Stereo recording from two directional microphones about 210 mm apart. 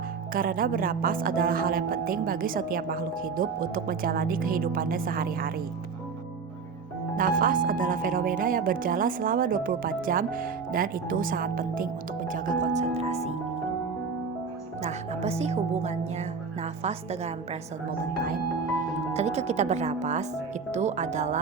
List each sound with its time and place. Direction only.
0.3 s speech: 40° right (ahead or behind)
7.2 s speech: 40° right (ahead or behind)
14.8 s speech: 30° right (ahead or behind)
19.1 s speech: 30° right (ahead or behind)